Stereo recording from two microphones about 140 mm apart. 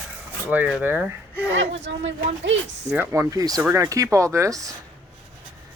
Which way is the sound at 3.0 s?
20° right (ahead or behind).